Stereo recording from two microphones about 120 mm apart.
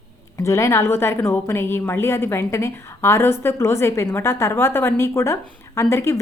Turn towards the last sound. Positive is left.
turn(degrees=20)  # may be behind; listen again after turning